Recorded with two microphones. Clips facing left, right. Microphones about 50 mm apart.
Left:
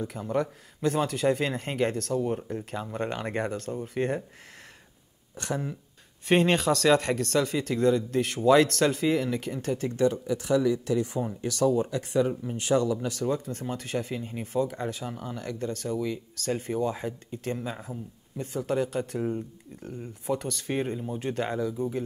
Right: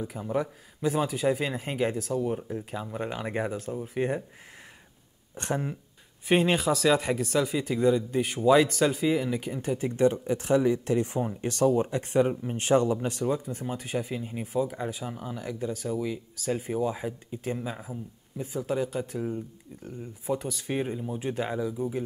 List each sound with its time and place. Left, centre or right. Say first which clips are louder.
0.0 s speech: left 1 dB; centre
5.3 s speech: right 1 dB; right
6.2 s speech: left 1 dB; centre
9.9 s speech: right 2 dB; right
13.2 s speech: even; centre